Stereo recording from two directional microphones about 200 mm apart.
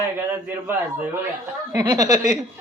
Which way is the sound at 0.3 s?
10° right (ahead or behind).